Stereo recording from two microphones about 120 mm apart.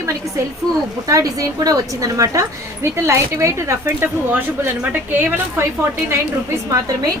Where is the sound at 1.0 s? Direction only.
25° right (ahead or behind).